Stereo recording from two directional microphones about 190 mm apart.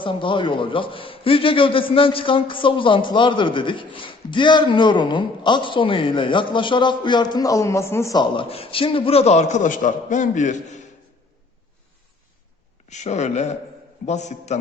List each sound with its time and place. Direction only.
0.0 s a man's voice: 25° left (ahead or behind)
12.9 s speech: 35° left (ahead or behind)